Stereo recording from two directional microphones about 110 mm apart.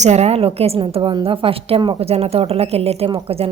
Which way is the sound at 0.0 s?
85° right.